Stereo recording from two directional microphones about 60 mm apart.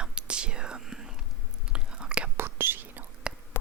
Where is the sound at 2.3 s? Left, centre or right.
Right.